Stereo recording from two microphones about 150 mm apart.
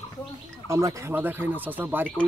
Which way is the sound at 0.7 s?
20° right (ahead or behind).